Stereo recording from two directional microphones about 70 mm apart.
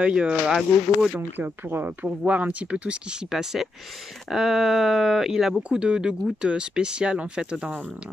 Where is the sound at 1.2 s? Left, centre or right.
Right.